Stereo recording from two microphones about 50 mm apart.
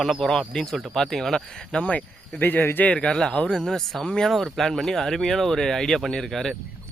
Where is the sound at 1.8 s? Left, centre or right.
Left.